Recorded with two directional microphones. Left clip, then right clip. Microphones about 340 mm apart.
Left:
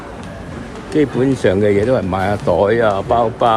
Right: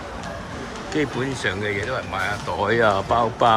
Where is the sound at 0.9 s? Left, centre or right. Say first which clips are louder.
Left 9 dB; centre.